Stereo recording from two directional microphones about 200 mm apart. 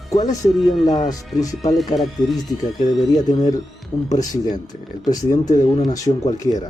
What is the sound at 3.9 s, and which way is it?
Speech, centre (ahead or behind).